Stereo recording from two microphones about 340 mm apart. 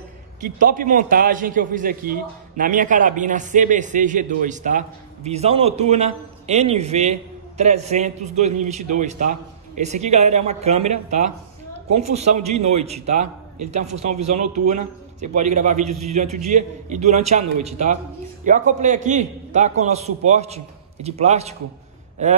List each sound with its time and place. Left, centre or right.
0.4 s a man's voice: right
13.8 s speech: right
14.2 s a man's voice: right